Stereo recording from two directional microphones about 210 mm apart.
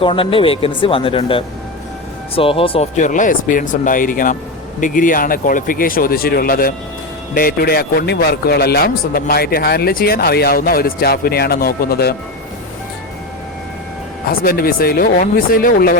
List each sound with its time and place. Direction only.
0.0 s speech: 25° left (ahead or behind); by 12.1 s 45° left (ahead or behind)
14.3 s speech: 45° left (ahead or behind)